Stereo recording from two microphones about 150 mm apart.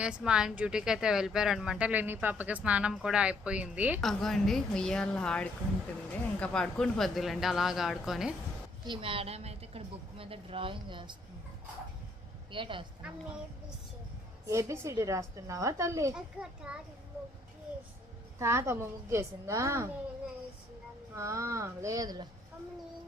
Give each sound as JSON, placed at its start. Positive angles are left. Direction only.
{"t": 0.0, "sound": "a woman's voice", "side_deg": -5}
{"t": 4.0, "sound": "speech", "side_deg": 0}
{"t": 8.8, "sound": "a woman's voice", "side_deg": -35}
{"t": 12.5, "sound": "speech", "side_deg": -35}
{"t": 14.4, "sound": "a woman's voice", "side_deg": -20}
{"t": 16.1, "sound": "speech", "side_deg": -5}
{"t": 18.3, "sound": "a woman's voice", "side_deg": -20}
{"t": 21.2, "sound": "a woman's voice", "side_deg": -20}